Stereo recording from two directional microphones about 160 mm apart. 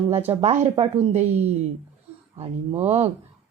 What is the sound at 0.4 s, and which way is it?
Speech, 40° right (ahead or behind).